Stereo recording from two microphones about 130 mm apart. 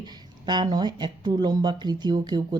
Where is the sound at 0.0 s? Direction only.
35° right (ahead or behind).